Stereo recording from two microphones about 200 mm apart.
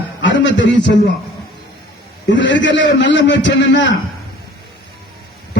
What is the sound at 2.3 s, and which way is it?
A man's voice, 65° left (ahead or behind).